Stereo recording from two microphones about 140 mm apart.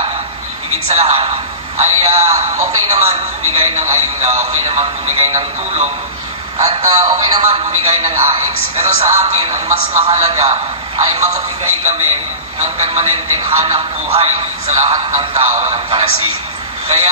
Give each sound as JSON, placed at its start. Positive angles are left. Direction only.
{"t": 0.9, "sound": "a man's voice", "side_deg": -45}
{"t": 12.5, "sound": "a man's voice", "side_deg": -55}